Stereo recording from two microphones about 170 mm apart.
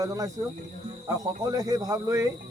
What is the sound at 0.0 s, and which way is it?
Speech, 20° right (ahead or behind).